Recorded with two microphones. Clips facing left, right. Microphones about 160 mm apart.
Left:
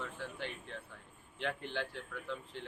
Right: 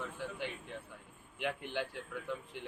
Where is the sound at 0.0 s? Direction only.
10° right (ahead or behind).